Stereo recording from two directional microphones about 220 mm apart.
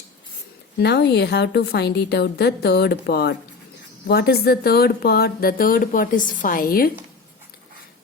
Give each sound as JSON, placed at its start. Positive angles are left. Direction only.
{"t": 0.8, "sound": "a woman's voice", "side_deg": 50}